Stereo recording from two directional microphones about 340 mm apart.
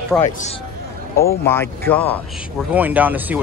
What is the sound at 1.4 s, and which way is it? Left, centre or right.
Speech, centre.